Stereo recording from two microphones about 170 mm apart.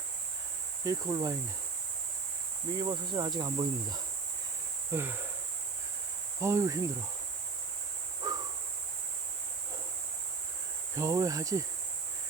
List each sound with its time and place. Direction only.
0.9 s insect: 20° right (ahead or behind)
2.7 s insect: 25° right (ahead or behind)
4.9 s speech: 15° right (ahead or behind)
6.4 s insect: 20° right (ahead or behind)
8.2 s a sound: 20° right (ahead or behind)
10.9 s insect: 20° right (ahead or behind)